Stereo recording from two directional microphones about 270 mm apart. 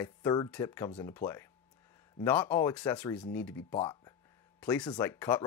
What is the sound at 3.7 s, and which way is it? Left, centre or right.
Speech, centre.